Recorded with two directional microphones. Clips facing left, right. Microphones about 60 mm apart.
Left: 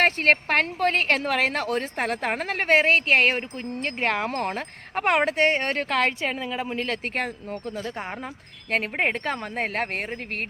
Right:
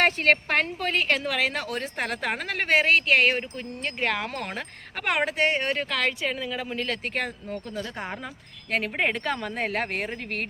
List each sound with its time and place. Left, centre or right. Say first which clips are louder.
0.0 s a woman's voice: left 1 dB; left
9.0 s a woman's voice: left 1 dB; left